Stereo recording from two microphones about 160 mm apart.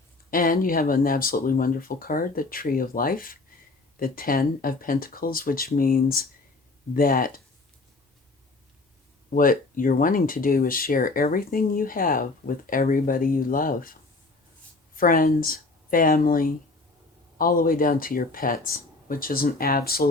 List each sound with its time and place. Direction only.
0.3 s speech: 60° left (ahead or behind)
9.3 s speech: 60° left (ahead or behind)
14.9 s speech: 60° left (ahead or behind)